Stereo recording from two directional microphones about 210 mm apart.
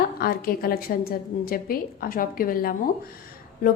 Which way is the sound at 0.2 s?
45° left (ahead or behind).